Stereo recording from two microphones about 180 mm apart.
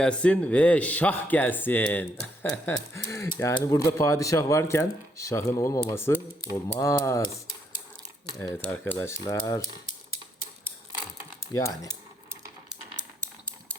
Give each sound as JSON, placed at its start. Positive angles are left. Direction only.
{"t": 0.0, "sound": "speech", "side_deg": 5}
{"t": 8.4, "sound": "speech", "side_deg": 10}
{"t": 9.8, "sound": "typewriter", "side_deg": 55}
{"t": 11.5, "sound": "speech", "side_deg": 20}